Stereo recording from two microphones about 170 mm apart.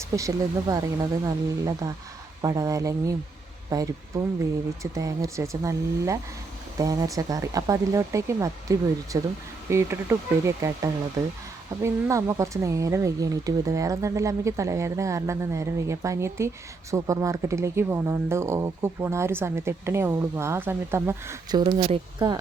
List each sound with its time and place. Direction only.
0.1 s speech: 20° right (ahead or behind)
21.6 s speech: 30° right (ahead or behind)